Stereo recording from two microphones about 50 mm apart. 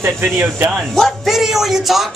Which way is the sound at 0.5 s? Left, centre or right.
Right.